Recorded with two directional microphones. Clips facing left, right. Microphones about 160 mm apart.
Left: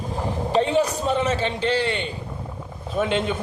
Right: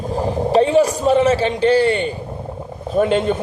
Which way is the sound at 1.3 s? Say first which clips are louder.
Right 8 dB; 5° right (ahead or behind).